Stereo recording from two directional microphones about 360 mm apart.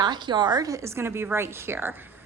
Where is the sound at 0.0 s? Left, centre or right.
Centre.